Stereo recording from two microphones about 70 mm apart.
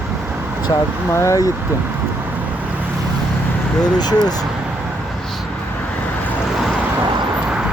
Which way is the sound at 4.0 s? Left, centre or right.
Left.